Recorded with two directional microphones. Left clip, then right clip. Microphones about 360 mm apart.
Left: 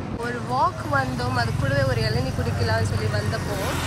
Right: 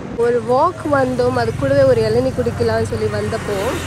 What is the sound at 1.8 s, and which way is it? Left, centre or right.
Speech, right.